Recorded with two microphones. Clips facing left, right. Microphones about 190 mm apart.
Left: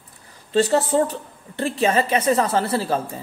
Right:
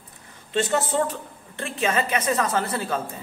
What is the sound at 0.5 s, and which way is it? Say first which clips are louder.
A woman's voice: left 5 dB; 35° left (ahead or behind).